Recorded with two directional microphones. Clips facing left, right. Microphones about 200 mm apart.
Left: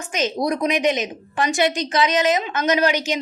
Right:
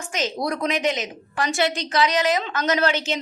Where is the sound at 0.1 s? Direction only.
20° left (ahead or behind).